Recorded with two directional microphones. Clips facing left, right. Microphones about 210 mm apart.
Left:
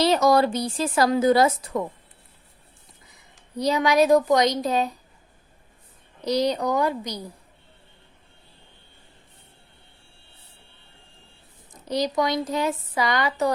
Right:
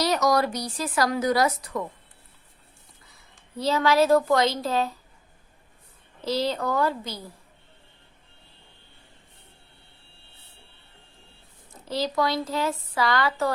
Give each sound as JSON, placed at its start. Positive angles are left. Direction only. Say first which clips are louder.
{"t": 0.0, "sound": "speech", "louder": "left 4 dB", "side_deg": 25}
{"t": 3.2, "sound": "speech", "louder": "left 4 dB", "side_deg": 15}
{"t": 6.2, "sound": "speech", "louder": "left 3 dB", "side_deg": 15}
{"t": 11.7, "sound": "speech", "louder": "left 3 dB", "side_deg": 15}